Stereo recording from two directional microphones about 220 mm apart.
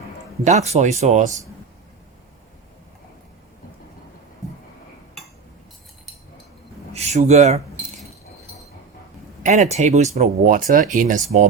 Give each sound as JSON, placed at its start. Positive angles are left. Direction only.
{"t": 0.4, "sound": "speech", "side_deg": -30}
{"t": 6.9, "sound": "speech", "side_deg": -30}
{"t": 9.4, "sound": "speech", "side_deg": -30}